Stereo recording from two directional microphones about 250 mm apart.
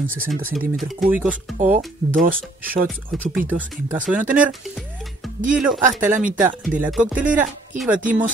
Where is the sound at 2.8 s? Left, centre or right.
Centre.